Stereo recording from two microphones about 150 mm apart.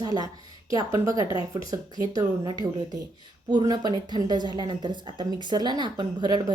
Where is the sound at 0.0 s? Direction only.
25° right (ahead or behind).